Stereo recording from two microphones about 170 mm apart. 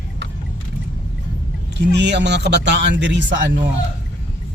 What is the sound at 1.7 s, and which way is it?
A man's voice, 90° right.